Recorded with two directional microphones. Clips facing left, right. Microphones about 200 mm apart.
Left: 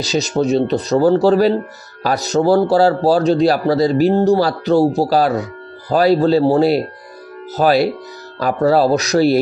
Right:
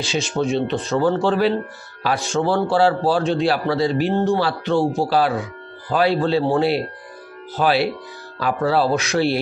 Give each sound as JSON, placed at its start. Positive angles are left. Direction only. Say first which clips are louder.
{"t": 0.0, "sound": "a man's voice", "louder": "left 5 dB", "side_deg": 40}